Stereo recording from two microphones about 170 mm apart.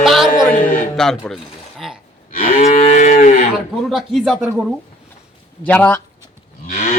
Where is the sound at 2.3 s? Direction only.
55° left (ahead or behind).